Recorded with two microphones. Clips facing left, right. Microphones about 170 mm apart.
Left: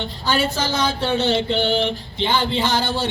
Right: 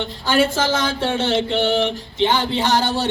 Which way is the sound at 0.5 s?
90° right.